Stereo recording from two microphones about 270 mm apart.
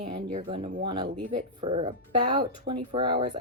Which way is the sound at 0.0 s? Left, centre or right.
Right.